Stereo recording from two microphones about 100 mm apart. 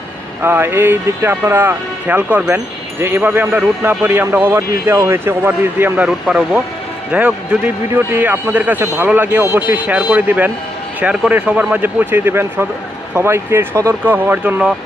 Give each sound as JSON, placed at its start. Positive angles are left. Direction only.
{"t": 0.4, "sound": "speech", "side_deg": -20}
{"t": 6.1, "sound": "a man's voice", "side_deg": -10}